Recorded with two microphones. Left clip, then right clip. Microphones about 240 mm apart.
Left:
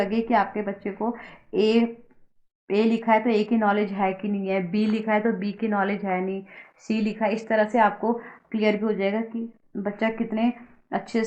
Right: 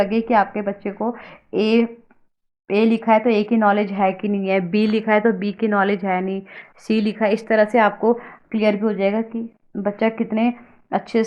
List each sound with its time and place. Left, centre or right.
0.0 s a woman's voice: right